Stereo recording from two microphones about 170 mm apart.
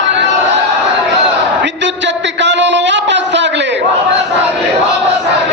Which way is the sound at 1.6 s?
90° right.